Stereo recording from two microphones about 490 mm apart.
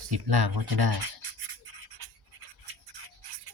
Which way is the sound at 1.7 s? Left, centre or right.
Right.